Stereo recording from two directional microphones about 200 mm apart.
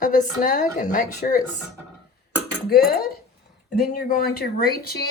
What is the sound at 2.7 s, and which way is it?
Speech, 50° left (ahead or behind).